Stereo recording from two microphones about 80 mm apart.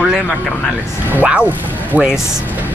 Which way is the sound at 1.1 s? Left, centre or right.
Centre.